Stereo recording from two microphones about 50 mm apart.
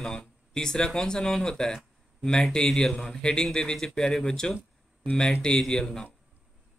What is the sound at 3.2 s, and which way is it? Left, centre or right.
Speech, centre.